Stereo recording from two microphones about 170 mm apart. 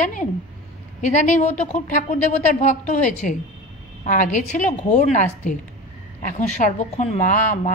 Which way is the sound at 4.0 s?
50° left (ahead or behind).